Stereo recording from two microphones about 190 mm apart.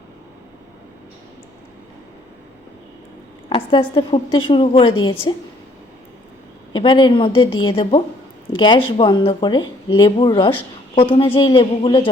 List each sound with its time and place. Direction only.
3.5 s speech: 25° left (ahead or behind)
6.7 s speech: 25° left (ahead or behind)